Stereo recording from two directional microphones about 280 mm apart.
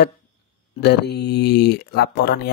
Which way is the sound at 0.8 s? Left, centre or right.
Left.